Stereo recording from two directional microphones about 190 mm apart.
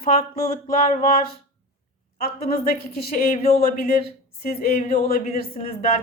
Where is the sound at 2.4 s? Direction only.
50° left (ahead or behind).